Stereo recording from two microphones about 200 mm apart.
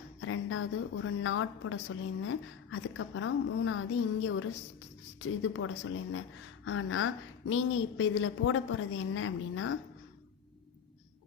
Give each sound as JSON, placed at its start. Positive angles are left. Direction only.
{"t": 0.2, "sound": "a woman's voice", "side_deg": 85}